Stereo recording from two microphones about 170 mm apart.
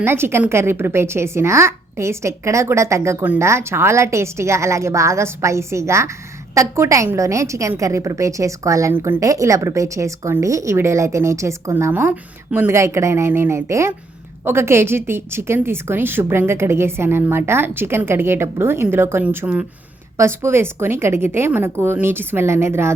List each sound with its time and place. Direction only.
0.0 s a woman's voice: 15° right (ahead or behind)